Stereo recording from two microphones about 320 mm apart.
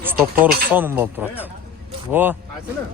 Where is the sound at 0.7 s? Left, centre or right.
Centre.